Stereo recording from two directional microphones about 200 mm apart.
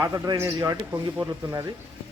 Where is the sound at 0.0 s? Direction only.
15° right (ahead or behind).